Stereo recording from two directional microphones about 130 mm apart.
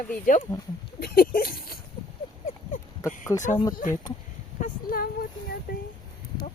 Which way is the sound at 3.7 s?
90° left.